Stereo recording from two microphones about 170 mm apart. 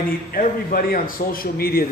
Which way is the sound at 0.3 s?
55° left (ahead or behind).